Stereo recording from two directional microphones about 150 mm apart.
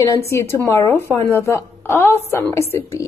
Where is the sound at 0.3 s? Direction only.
15° left (ahead or behind).